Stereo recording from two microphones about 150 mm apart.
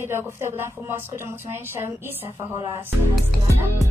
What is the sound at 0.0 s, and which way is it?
A woman's voice, 15° right (ahead or behind).